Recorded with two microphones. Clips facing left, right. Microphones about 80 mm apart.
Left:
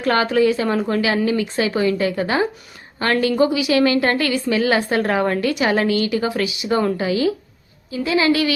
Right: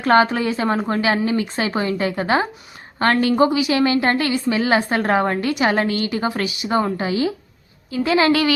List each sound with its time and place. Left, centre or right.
0.0 s a woman's voice: right